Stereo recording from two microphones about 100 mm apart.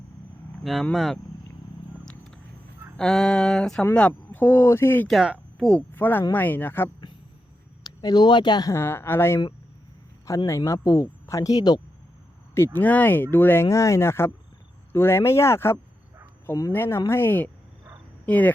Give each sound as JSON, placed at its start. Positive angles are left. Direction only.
{"t": 0.6, "sound": "speech", "side_deg": 0}
{"t": 2.0, "sound": "a sound", "side_deg": 5}
{"t": 3.0, "sound": "speech", "side_deg": 5}
{"t": 5.0, "sound": "speech", "side_deg": 0}
{"t": 5.9, "sound": "speech", "side_deg": 20}
{"t": 7.9, "sound": "speech", "side_deg": 45}
{"t": 8.7, "sound": "speech", "side_deg": 25}
{"t": 12.5, "sound": "speech", "side_deg": 20}
{"t": 16.7, "sound": "speech", "side_deg": 20}